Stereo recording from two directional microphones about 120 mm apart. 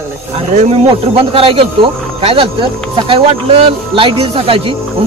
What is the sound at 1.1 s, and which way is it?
Speech, 50° right (ahead or behind).